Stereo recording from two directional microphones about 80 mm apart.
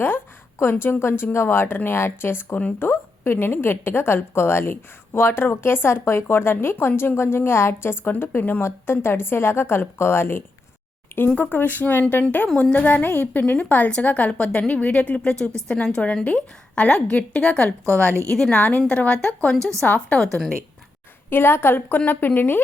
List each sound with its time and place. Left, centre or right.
0.6 s a woman's voice: left; by 17.7 s centre
17.8 s a woman's voice: right
18.3 s a woman's voice: centre
18.6 s a woman's voice: centre
21.2 s a woman's voice: left